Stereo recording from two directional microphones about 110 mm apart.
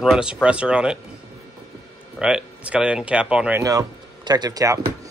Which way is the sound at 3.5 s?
30° right (ahead or behind).